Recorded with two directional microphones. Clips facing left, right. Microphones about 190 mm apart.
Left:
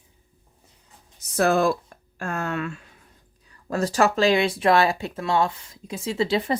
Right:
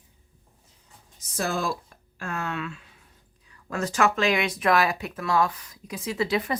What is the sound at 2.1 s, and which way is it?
Speech, 45° left (ahead or behind).